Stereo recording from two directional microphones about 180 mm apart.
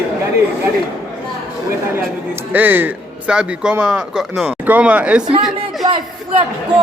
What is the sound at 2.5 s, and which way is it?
Speech, 10° right (ahead or behind).